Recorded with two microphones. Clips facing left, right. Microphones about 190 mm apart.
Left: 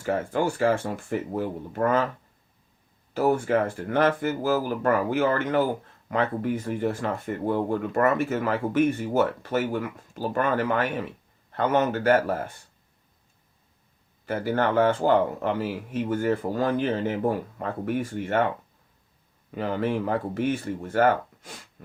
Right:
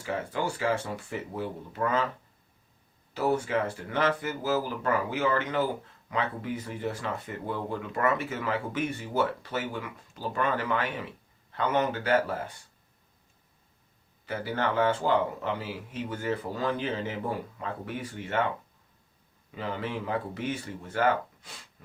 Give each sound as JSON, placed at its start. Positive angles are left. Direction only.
{"t": 0.0, "sound": "speech", "side_deg": 50}
{"t": 3.2, "sound": "speech", "side_deg": 50}
{"t": 14.3, "sound": "speech", "side_deg": 50}
{"t": 19.5, "sound": "speech", "side_deg": 50}